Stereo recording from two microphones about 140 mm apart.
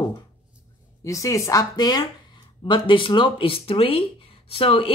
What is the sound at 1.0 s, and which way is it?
Speech, 20° left (ahead or behind).